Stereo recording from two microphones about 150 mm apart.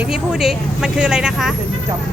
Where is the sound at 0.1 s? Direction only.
5° right (ahead or behind).